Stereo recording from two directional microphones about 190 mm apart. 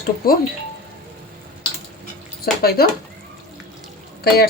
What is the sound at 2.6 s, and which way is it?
Speech, 55° left (ahead or behind).